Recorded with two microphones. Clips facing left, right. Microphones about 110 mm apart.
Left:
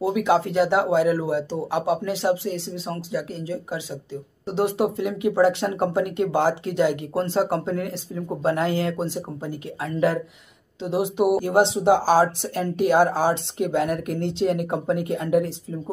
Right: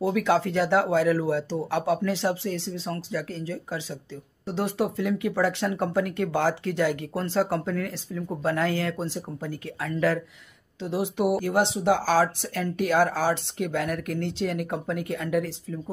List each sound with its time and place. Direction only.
0.0 s speech: 15° left (ahead or behind)